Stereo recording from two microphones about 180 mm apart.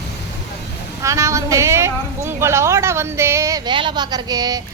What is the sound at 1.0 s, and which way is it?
A woman's voice, 15° right (ahead or behind).